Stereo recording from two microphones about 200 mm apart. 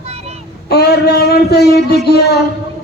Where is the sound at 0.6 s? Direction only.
55° left (ahead or behind).